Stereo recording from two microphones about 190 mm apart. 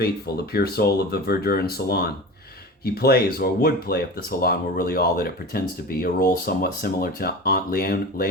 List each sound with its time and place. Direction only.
0.5 s speech: 55° left (ahead or behind)